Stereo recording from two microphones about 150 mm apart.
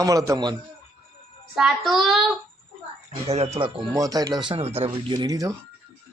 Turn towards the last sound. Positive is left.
turn(degrees=-25)  # may be behind; listen again after turning